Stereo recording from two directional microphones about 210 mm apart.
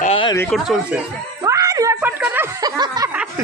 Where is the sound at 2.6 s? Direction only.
20° right (ahead or behind).